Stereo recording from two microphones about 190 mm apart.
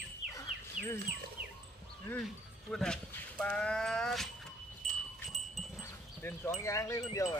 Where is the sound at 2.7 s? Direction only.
5° left (ahead or behind).